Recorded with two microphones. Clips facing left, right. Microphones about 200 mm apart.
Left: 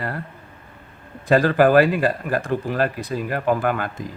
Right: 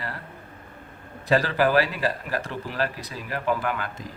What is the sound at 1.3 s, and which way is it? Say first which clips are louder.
Speech: left 6 dB; 50° left (ahead or behind).